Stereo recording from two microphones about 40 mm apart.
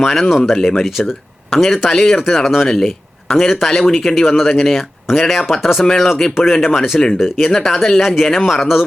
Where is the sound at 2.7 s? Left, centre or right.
Centre.